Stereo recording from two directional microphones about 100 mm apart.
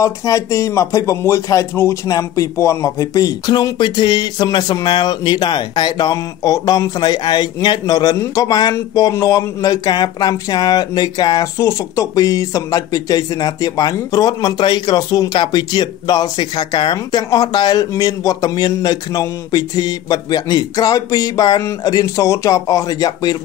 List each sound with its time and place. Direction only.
0.0 s speech: 30° left (ahead or behind)
8.7 s speech: 30° left (ahead or behind)
15.3 s speech: 50° left (ahead or behind)